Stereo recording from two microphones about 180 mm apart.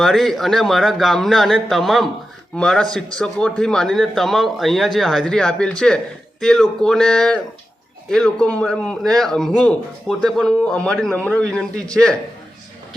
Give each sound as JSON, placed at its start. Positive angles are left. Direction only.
{"t": 0.0, "sound": "a man's voice", "side_deg": 0}